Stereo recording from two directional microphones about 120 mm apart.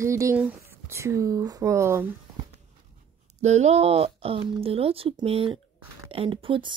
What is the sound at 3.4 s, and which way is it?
Speech, 70° right (ahead or behind).